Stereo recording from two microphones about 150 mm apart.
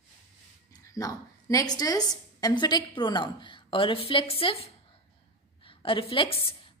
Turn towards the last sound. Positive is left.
turn(degrees=35)  # may be behind; listen again after turning